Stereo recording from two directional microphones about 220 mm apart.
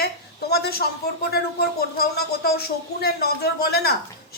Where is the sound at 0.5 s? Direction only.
45° left (ahead or behind).